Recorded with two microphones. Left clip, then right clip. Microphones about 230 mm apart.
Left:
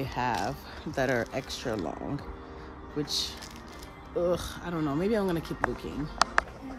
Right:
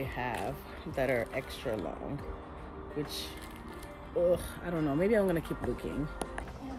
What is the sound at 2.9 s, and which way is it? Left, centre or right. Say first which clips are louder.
Speech: left 7 dB; centre.